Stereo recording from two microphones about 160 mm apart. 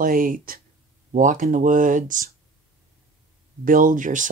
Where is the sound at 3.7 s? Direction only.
60° right (ahead or behind).